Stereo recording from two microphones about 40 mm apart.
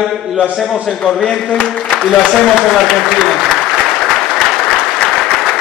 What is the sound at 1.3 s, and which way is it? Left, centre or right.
Speech, centre.